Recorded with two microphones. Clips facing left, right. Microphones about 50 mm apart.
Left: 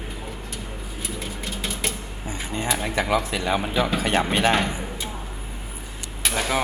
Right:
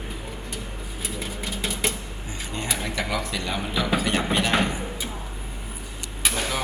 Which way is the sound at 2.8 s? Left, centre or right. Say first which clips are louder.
Left 7 dB; left.